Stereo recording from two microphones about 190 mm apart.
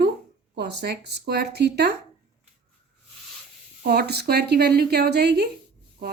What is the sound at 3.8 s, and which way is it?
Speech, 55° right (ahead or behind).